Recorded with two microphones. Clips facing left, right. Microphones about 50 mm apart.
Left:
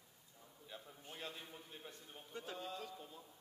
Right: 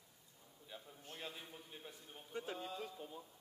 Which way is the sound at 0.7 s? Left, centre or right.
Centre.